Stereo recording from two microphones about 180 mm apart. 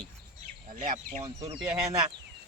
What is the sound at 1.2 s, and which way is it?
Speech, 20° right (ahead or behind).